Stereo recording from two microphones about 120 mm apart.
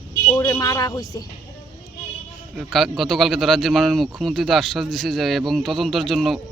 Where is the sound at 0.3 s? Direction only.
30° left (ahead or behind).